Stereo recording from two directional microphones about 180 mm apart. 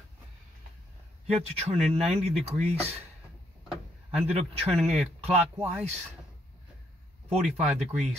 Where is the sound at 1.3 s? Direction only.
35° right (ahead or behind).